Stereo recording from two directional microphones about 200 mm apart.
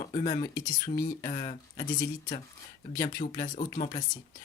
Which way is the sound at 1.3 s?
40° left (ahead or behind).